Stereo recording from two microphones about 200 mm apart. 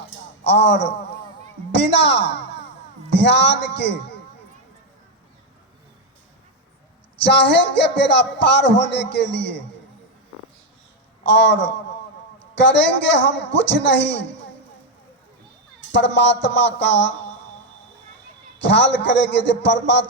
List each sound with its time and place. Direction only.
0.4 s a man's voice: 60° left (ahead or behind)
7.3 s a man's voice: 60° left (ahead or behind)
11.3 s a man's voice: 60° left (ahead or behind)
16.0 s a man's voice: 60° left (ahead or behind)
18.7 s a man's voice: 60° left (ahead or behind)